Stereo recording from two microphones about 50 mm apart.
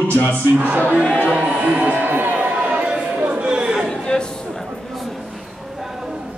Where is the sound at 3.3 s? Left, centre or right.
Centre.